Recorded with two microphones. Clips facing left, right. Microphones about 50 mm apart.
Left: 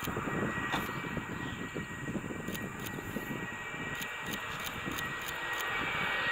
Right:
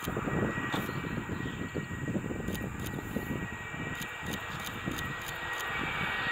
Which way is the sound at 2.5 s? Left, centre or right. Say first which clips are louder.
Right 2 dB; left.